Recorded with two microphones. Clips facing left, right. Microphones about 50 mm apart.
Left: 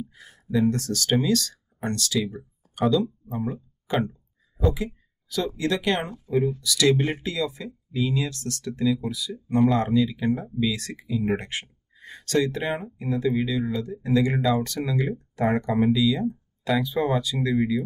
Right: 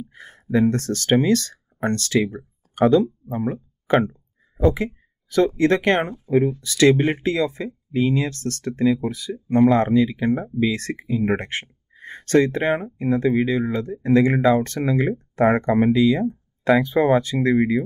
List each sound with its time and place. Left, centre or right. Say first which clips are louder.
0.1 s speech: right 6 dB; right
4.0 s a sound: right 4 dB; right
5.6 s speech: right 7 dB; right